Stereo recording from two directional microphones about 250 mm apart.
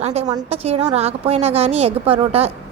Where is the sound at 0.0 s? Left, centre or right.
Right.